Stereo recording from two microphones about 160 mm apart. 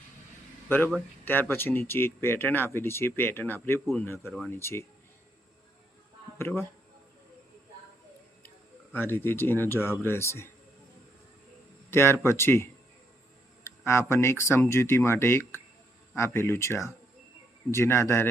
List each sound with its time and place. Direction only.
1.2 s speech: 10° left (ahead or behind)
6.4 s speech: 15° left (ahead or behind)
8.9 s speech: 15° left (ahead or behind)
11.9 s speech: 15° left (ahead or behind)